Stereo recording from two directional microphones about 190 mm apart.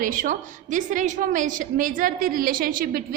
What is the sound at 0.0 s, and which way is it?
A woman's voice, 45° right (ahead or behind).